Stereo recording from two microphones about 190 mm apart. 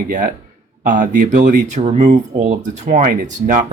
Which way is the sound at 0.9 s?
45° right (ahead or behind).